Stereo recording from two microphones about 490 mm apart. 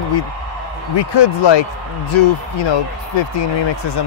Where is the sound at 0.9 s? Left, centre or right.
Left.